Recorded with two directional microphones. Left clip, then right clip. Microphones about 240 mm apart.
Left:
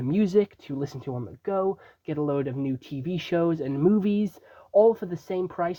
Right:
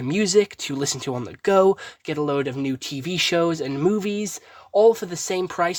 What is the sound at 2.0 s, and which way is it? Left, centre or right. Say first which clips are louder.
Speech: right 4 dB; centre.